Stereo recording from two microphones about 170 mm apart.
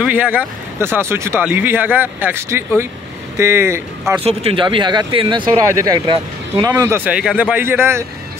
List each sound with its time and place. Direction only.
0.0 s speech: 10° right (ahead or behind)
4.2 s speech: 35° right (ahead or behind); by 8.0 s 15° right (ahead or behind)